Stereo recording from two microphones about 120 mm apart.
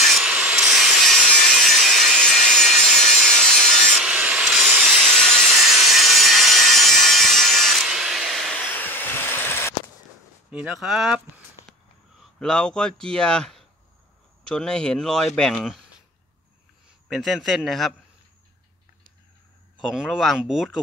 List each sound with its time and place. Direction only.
0.0 s wood: 5° right (ahead or behind)
4.0 s sawing: 10° right (ahead or behind)
8.5 s a sound: 15° left (ahead or behind)
10.5 s speech: 5° right (ahead or behind)
12.2 s speech: 5° left (ahead or behind)
17.1 s speech: centre (ahead or behind)
19.9 s speech: 5° right (ahead or behind)